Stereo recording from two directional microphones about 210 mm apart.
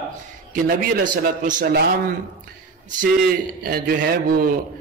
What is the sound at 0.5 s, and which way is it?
A man's voice, 40° right (ahead or behind).